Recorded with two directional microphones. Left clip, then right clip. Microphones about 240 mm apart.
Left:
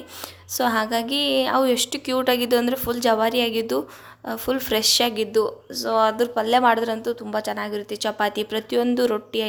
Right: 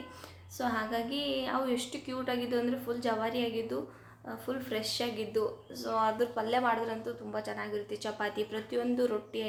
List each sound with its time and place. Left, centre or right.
0.5 s a woman's voice: left